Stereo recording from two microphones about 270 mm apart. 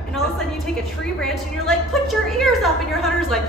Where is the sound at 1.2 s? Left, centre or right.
Centre.